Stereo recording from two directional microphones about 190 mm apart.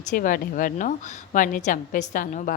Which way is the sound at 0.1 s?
45° left (ahead or behind).